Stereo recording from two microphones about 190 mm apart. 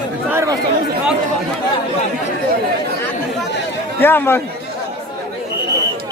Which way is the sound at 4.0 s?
10° left (ahead or behind).